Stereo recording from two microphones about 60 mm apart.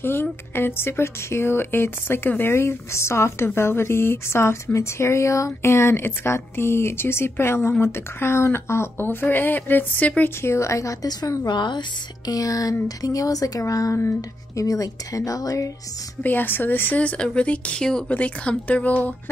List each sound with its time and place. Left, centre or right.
0.0 s speech: left
2.5 s speech: left
10.4 s a woman's voice: left
16.2 s speech: left
17.0 s speech: centre